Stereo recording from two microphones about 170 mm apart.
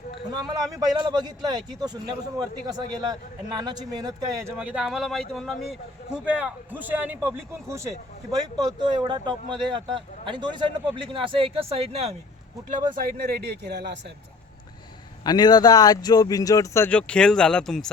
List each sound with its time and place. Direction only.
0.3 s a man's voice: 25° right (ahead or behind)
4.5 s a man's voice: 5° right (ahead or behind); by 12.1 s 35° right (ahead or behind)
13.0 s speech: 60° right (ahead or behind)
15.2 s speech: 25° left (ahead or behind); by 17.9 s centre (ahead or behind)